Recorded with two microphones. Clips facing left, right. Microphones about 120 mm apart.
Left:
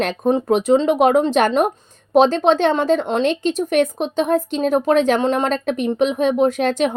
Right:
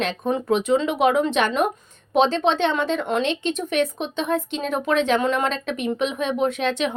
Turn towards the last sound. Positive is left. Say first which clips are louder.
# left 5 dB
turn(degrees=45)  # may be behind; listen again after turning